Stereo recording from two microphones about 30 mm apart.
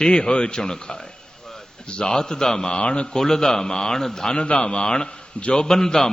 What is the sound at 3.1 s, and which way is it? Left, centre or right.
A man's voice, centre.